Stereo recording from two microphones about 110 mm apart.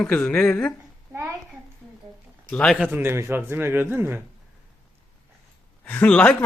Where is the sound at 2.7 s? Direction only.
15° right (ahead or behind).